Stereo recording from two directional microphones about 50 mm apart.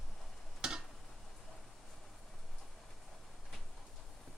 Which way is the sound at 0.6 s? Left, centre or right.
Centre.